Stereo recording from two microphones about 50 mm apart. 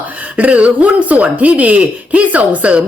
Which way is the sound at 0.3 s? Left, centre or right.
Right.